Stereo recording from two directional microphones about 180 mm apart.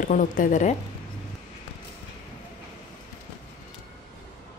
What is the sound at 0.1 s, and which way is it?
Speech, 45° left (ahead or behind).